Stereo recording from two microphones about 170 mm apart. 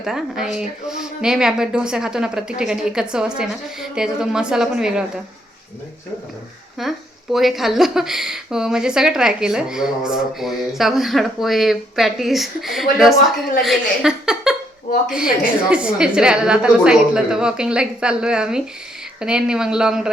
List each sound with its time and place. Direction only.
0.0 s a woman's voice: 5° right (ahead or behind)
6.8 s a woman's voice: centre (ahead or behind)
14.9 s a woman's voice: 55° left (ahead or behind)
15.7 s a woman's voice: 5° right (ahead or behind)